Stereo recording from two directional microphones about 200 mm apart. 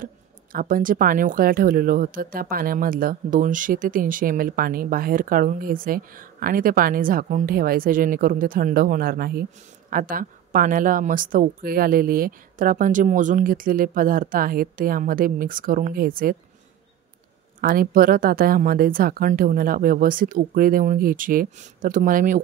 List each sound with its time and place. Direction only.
0.0 s speech: 45° right (ahead or behind)
17.6 s speech: 45° right (ahead or behind)